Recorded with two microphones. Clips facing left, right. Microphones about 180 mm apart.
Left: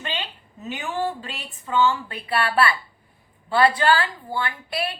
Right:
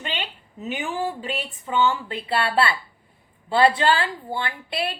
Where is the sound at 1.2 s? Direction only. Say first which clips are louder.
Right 7 dB; 20° right (ahead or behind).